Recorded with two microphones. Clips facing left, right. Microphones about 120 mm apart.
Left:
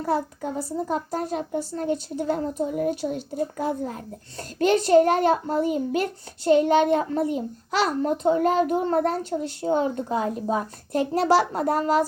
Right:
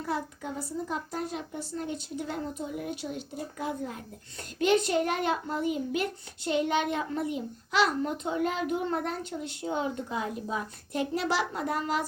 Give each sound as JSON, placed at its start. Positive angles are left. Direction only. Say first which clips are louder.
{"t": 0.0, "sound": "a child's voice", "louder": "left 8 dB", "side_deg": 45}